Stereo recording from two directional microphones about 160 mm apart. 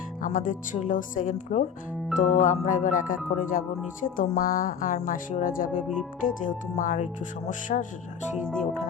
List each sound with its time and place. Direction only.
0.2 s speech: 55° left (ahead or behind)